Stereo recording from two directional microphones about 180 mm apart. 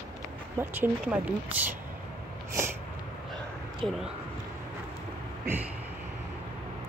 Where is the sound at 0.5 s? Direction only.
10° right (ahead or behind).